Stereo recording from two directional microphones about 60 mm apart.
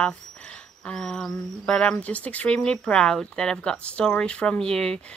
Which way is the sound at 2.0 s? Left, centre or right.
Left.